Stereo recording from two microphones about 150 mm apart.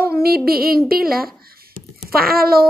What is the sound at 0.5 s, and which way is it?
Speech, 85° right.